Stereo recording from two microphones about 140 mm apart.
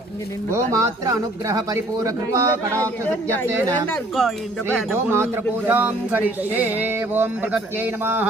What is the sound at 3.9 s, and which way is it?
Speech, 5° left (ahead or behind).